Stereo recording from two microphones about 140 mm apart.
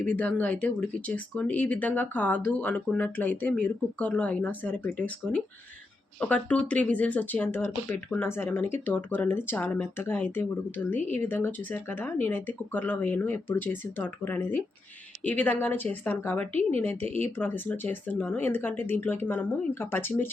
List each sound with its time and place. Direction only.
0.0 s speech: 10° left (ahead or behind)